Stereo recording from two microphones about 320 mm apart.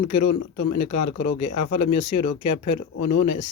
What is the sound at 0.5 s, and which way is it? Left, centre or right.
Speech, left.